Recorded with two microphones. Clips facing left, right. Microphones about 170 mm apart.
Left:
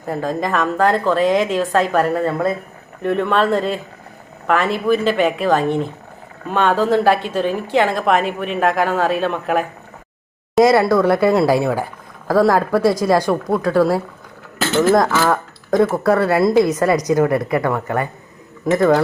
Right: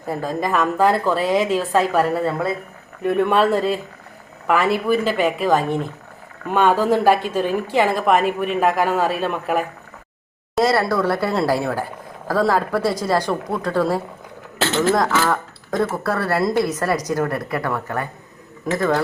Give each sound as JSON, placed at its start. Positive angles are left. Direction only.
{"t": 0.1, "sound": "a woman's voice", "side_deg": -5}
{"t": 10.6, "sound": "speech", "side_deg": 15}